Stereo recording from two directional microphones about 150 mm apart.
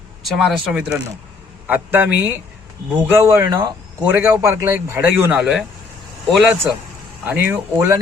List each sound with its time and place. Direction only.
0.3 s a man's voice: centre (ahead or behind); by 8.0 s 15° right (ahead or behind)